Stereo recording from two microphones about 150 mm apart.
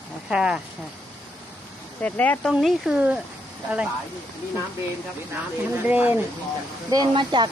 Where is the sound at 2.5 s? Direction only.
5° right (ahead or behind).